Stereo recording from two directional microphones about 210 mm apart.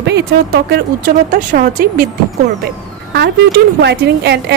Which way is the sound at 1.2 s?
40° right (ahead or behind).